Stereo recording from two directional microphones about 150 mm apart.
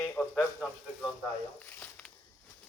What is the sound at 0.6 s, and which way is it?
Speech, 10° right (ahead or behind).